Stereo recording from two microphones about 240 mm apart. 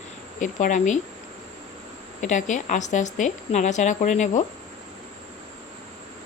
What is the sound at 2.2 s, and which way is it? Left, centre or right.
Speech, left.